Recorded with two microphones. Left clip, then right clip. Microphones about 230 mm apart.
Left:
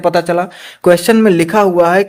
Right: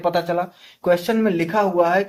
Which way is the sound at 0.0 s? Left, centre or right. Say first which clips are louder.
Left 8 dB; left.